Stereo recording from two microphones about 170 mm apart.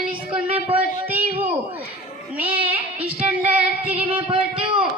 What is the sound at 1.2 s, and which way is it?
Speech, 40° right (ahead or behind).